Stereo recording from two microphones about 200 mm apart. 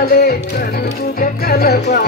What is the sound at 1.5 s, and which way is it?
Music, 55° left (ahead or behind).